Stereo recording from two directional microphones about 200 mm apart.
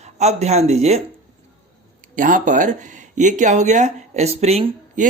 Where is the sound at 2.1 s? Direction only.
40° right (ahead or behind).